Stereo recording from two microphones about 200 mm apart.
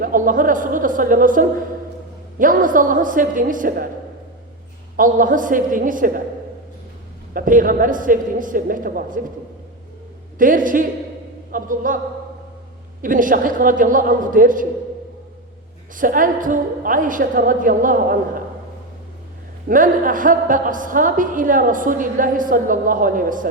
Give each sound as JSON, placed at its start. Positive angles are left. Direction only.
{"t": 0.0, "sound": "a woman's voice", "side_deg": -45}
{"t": 4.9, "sound": "a woman's voice", "side_deg": -40}
{"t": 7.3, "sound": "a woman's voice", "side_deg": -45}
{"t": 10.3, "sound": "a woman's voice", "side_deg": -40}
{"t": 13.0, "sound": "a woman's voice", "side_deg": -40}
{"t": 16.0, "sound": "a woman's voice", "side_deg": -45}
{"t": 19.6, "sound": "a woman's voice", "side_deg": -45}